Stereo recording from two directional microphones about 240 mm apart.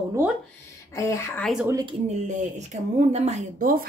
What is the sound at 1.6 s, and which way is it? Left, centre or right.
Speech, centre.